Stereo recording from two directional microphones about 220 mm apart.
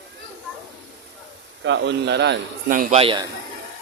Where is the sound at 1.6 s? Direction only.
55° right (ahead or behind).